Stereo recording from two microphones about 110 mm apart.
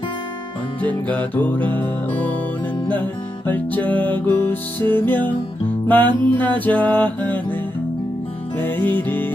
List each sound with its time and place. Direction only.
0.8 s music: 15° left (ahead or behind)
8.5 s music: 15° left (ahead or behind)